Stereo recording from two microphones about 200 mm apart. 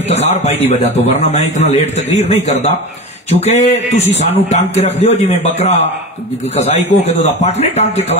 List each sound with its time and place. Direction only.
0.1 s a man's voice: 35° left (ahead or behind)